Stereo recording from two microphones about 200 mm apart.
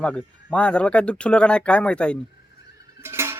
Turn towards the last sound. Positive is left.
turn(degrees=-10)  # may be behind; listen again after turning